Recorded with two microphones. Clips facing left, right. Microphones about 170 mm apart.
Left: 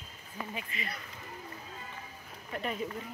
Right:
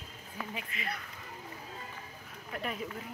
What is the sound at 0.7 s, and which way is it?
Speech, centre (ahead or behind).